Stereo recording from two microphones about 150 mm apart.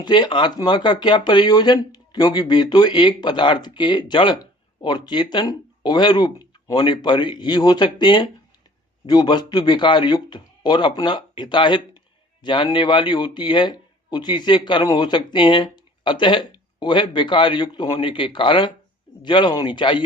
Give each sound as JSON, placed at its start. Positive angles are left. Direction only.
{"t": 0.0, "sound": "speech", "side_deg": 30}